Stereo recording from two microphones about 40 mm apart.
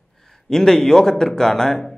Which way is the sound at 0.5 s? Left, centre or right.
Centre.